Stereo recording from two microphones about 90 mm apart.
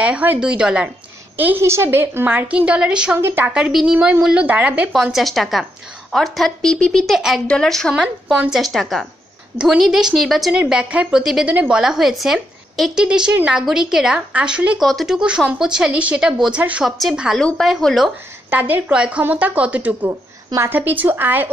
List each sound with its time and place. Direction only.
0.0 s a woman's voice: 15° right (ahead or behind)
1.3 s a woman's voice: 20° right (ahead or behind)
3.2 s a woman's voice: 25° right (ahead or behind)
3.4 s a woman's voice: 15° right (ahead or behind)
5.0 s speech: centre (ahead or behind)
7.2 s speech: 5° right (ahead or behind)
7.4 s a woman's voice: 5° left (ahead or behind)
7.9 s a woman's voice: 10° right (ahead or behind)
10.5 s a woman's voice: 10° right (ahead or behind)
14.8 s a woman's voice: centre (ahead or behind)
17.4 s a woman's voice: 5° left (ahead or behind)
18.5 s a woman's voice: 20° right (ahead or behind)
20.1 s a woman's voice: 30° right (ahead or behind)